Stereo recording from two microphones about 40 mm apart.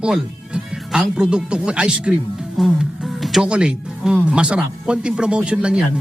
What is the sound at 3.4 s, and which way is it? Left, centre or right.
Speech, right.